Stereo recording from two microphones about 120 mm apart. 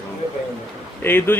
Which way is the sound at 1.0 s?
20° left (ahead or behind).